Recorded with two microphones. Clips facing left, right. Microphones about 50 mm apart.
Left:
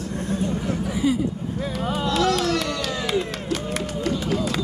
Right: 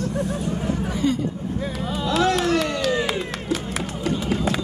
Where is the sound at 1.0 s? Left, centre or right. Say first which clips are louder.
Left 1 dB; centre.